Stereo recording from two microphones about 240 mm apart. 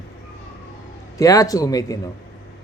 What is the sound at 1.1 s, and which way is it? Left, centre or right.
Speech, centre.